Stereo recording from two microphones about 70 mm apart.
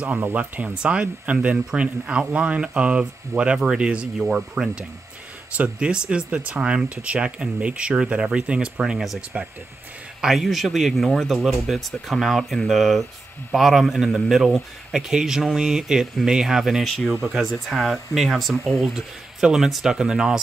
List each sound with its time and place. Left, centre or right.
0.2 s speech: right
10.2 s speech: centre